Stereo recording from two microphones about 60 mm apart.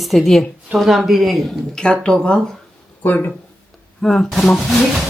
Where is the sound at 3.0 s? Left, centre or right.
Left.